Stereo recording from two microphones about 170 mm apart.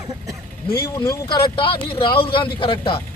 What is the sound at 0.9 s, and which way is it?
A man's voice, 20° left (ahead or behind).